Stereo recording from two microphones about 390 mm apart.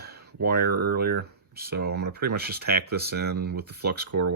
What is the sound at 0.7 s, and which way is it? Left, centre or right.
Speech, right.